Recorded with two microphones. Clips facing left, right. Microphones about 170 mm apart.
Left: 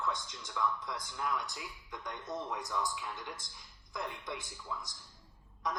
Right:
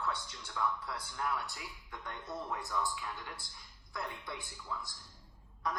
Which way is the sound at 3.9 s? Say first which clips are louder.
Left 2 dB; 20° left (ahead or behind).